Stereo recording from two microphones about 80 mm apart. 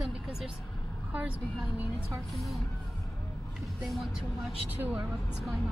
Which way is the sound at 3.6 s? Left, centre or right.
Centre.